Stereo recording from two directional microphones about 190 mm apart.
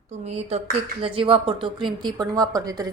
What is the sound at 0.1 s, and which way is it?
A woman's voice, 35° right (ahead or behind).